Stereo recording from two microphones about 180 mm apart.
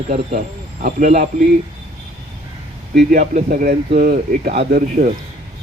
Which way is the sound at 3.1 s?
45° right (ahead or behind).